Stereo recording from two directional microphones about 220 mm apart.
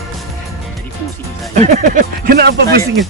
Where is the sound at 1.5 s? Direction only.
35° right (ahead or behind).